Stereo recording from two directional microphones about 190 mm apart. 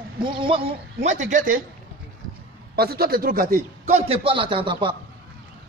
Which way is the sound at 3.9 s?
30° right (ahead or behind).